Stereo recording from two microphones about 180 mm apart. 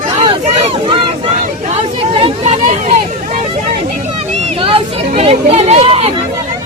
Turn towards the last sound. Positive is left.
turn(degrees=-35)  # may be behind; listen again after turning